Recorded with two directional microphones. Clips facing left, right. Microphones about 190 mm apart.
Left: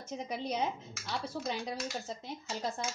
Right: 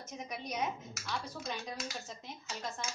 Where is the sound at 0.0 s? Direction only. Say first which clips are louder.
Left 5 dB; 30° left (ahead or behind).